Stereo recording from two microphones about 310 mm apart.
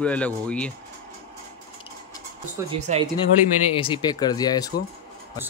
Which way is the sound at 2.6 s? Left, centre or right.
Centre.